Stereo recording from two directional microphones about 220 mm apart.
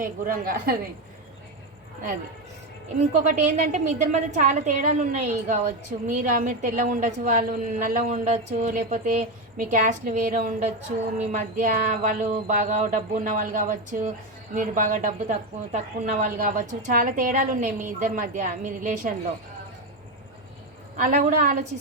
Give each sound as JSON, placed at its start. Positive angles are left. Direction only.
{"t": 0.0, "sound": "a woman's voice", "side_deg": -40}
{"t": 3.2, "sound": "a woman's voice", "side_deg": -35}
{"t": 20.9, "sound": "a woman's voice", "side_deg": -35}